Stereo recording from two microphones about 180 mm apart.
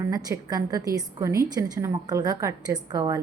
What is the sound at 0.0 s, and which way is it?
Speech, 20° right (ahead or behind).